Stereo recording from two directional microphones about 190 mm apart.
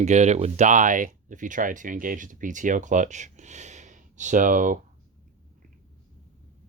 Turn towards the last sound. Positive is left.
turn(degrees=-45)  # may be behind; listen again after turning